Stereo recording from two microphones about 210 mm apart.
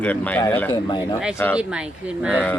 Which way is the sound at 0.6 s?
20° left (ahead or behind).